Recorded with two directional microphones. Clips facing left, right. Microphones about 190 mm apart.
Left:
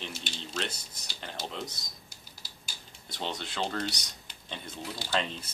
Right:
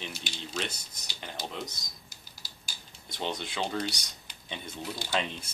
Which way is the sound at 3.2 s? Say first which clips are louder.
Right 1 dB; 10° right (ahead or behind).